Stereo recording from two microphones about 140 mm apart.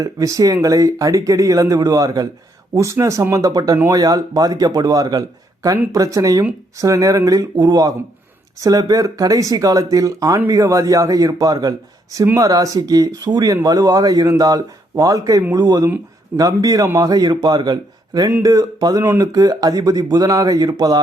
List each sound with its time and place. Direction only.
0.0 s speech: 25° right (ahead or behind)